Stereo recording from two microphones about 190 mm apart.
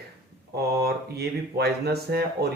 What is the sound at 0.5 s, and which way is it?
Speech, 55° right (ahead or behind).